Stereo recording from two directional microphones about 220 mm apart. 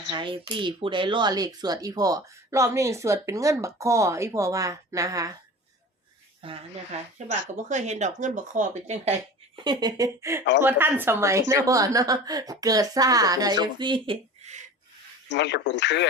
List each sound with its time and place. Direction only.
0.1 s a woman's voice: 20° right (ahead or behind)
6.4 s a woman's voice: 25° right (ahead or behind)
7.3 s speech: 35° right (ahead or behind)
9.6 s a woman's voice: 15° right (ahead or behind)
15.3 s speech: 50° left (ahead or behind)